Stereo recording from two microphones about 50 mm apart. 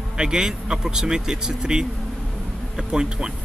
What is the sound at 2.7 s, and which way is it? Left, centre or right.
Insect, centre.